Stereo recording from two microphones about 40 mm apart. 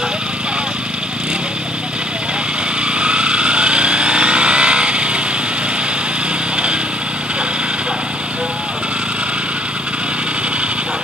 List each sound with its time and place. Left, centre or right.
3.0 s vehicle: right
6.5 s vehicle: right